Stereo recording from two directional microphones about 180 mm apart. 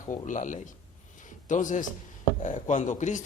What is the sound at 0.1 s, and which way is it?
Speech, 45° left (ahead or behind).